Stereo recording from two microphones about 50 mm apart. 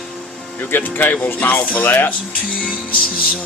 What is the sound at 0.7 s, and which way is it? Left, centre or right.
Speech, left.